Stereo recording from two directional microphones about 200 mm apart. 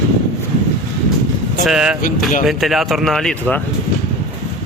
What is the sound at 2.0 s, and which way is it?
Speech, 45° left (ahead or behind).